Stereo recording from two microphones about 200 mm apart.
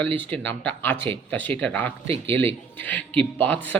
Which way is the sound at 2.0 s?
30° right (ahead or behind).